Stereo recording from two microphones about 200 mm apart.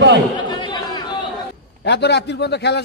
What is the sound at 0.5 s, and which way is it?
Chatter, 20° left (ahead or behind).